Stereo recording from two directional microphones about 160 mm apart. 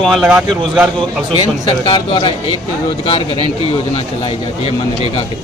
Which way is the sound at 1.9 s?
30° left (ahead or behind).